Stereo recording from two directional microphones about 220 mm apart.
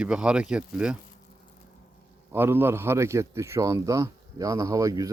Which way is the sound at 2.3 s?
10° right (ahead or behind).